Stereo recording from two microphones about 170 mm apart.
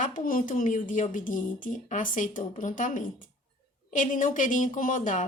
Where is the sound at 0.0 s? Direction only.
55° left (ahead or behind).